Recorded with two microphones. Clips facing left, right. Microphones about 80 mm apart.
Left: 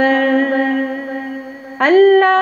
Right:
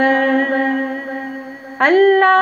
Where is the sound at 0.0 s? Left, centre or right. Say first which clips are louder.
Left 1 dB; right.